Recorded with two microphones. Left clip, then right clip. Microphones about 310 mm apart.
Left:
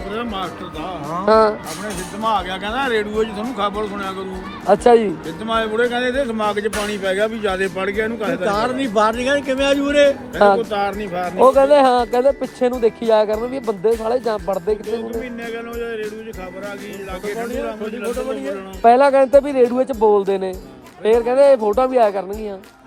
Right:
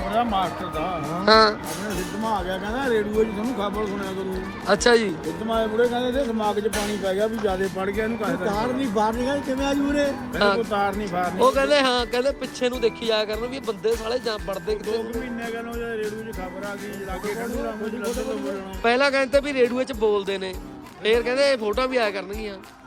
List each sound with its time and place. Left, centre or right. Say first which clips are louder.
0.1 s speech: right 3 dB; centre
1.2 s speech: left 3 dB; centre
4.6 s speech: left 6 dB; centre
5.5 s music: left 4 dB; left
7.6 s speech: left 5 dB; centre
10.6 s speech: left 3 dB; centre
11.3 s speech: left 8 dB; centre
15.8 s speech: left 4 dB; centre
18.8 s speech: left 9 dB; centre